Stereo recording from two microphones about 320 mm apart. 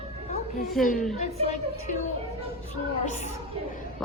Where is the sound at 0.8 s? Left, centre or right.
Centre.